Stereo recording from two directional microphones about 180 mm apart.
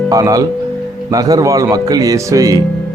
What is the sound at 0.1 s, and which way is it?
Speech, 20° right (ahead or behind).